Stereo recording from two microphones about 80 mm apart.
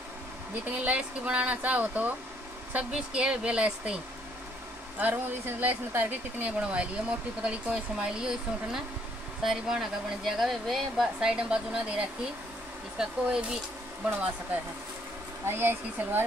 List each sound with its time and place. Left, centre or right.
0.7 s speech: centre
15.4 s speech: right